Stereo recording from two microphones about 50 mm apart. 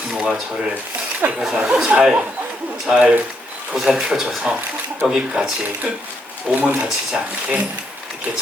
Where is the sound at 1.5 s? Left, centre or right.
Centre.